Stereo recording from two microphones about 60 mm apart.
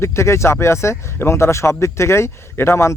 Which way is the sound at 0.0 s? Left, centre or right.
Left.